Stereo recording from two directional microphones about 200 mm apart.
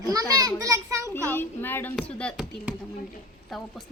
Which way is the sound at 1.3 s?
10° left (ahead or behind).